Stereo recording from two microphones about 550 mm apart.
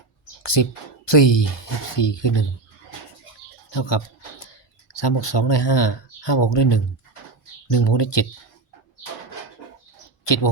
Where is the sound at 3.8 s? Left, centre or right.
Left.